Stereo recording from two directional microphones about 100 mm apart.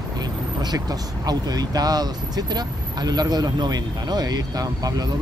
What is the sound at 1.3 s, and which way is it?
Speech, 40° right (ahead or behind).